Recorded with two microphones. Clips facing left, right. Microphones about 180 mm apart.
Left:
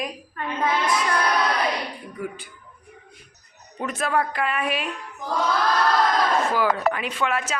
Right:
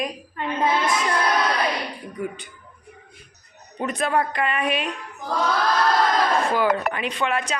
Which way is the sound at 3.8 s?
Centre (ahead or behind).